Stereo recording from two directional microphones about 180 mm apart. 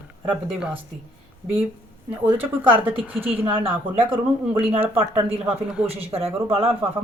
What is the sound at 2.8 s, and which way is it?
Speech, 10° right (ahead or behind).